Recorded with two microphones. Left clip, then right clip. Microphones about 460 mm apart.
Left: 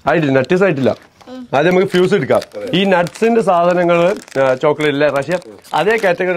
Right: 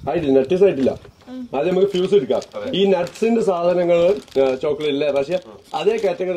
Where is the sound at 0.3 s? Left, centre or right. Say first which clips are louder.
Left 2 dB; left.